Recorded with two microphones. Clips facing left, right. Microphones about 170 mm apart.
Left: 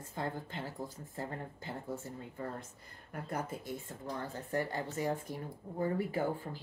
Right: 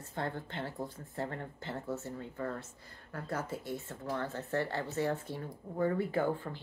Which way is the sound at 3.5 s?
25° right (ahead or behind).